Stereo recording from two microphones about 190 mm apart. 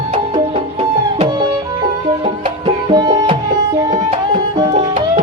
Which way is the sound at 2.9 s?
20° right (ahead or behind).